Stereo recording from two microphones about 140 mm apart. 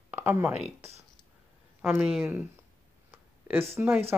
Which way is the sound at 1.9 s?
5° right (ahead or behind).